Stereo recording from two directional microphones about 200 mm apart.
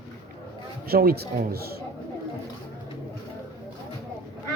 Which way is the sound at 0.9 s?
50° right (ahead or behind).